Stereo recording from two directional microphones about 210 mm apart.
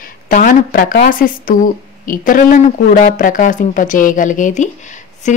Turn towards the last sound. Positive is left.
turn(degrees=35)  # may be behind; listen again after turning